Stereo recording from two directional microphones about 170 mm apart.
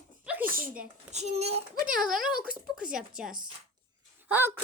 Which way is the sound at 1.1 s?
40° right (ahead or behind).